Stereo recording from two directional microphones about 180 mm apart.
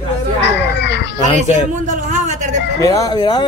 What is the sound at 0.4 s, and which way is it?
Children playing, 70° left (ahead or behind).